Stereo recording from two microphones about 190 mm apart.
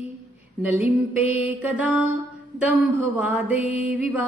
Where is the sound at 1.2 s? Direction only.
10° right (ahead or behind).